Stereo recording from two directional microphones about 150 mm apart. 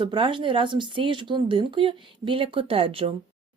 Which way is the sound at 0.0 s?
30° right (ahead or behind).